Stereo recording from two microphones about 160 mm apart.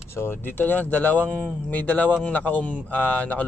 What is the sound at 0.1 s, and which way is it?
Speech, 15° left (ahead or behind).